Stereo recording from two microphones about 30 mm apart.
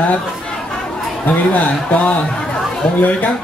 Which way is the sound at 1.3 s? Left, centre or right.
Left.